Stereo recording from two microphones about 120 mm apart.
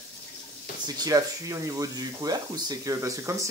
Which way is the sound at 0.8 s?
30° right (ahead or behind).